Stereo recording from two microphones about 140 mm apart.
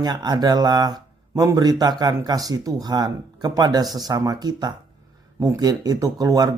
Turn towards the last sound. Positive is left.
turn(degrees=-25)  # may be behind; listen again after turning